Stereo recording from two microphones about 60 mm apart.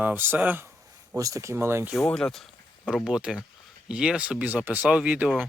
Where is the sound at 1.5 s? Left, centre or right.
Right.